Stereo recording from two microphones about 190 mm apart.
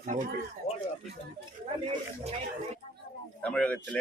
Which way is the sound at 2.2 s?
35° right (ahead or behind).